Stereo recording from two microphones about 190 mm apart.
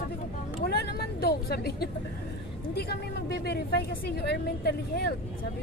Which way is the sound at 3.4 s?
60° left (ahead or behind).